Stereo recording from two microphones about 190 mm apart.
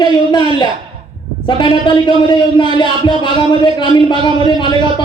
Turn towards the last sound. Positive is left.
turn(degrees=25)  # may be behind; listen again after turning